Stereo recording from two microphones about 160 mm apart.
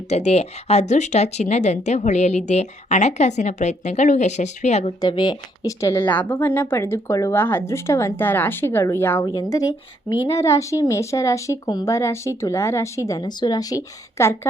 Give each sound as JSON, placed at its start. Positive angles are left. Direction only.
{"t": 0.1, "sound": "speech", "side_deg": 40}
{"t": 4.9, "sound": "speech", "side_deg": 25}